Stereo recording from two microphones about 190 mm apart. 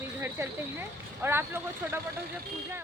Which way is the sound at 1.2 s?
10° right (ahead or behind).